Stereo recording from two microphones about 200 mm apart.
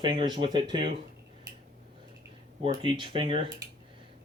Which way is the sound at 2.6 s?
25° right (ahead or behind).